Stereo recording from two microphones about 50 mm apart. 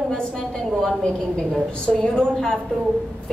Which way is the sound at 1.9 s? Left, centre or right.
Centre.